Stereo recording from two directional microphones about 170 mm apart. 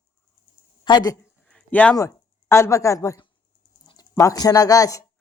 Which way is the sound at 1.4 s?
5° left (ahead or behind).